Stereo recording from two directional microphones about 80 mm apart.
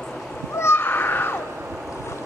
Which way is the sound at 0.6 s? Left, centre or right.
Left.